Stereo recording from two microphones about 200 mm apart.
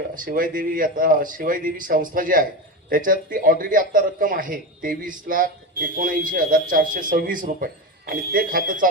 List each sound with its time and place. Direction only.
0.1 s a man's voice: 45° right (ahead or behind)